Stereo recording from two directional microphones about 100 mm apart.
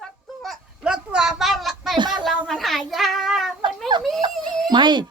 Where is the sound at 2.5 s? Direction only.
5° left (ahead or behind).